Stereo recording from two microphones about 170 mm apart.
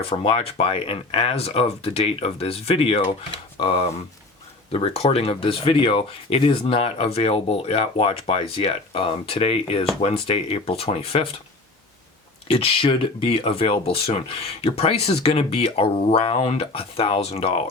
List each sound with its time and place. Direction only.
0.0 s speech: 35° left (ahead or behind)
12.5 s speech: 35° left (ahead or behind)